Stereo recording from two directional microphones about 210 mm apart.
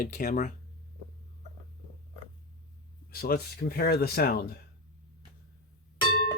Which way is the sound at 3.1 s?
45° left (ahead or behind).